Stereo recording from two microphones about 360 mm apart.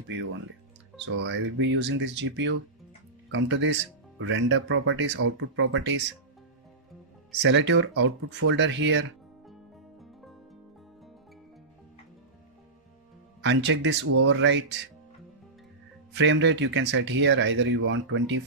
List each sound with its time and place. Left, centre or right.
1.0 s speech: right
7.4 s speech: right
13.4 s speech: right
16.1 s speech: right